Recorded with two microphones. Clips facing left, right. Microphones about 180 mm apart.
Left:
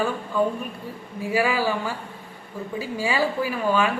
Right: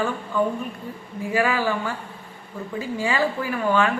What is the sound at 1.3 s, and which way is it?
Speech, 10° left (ahead or behind).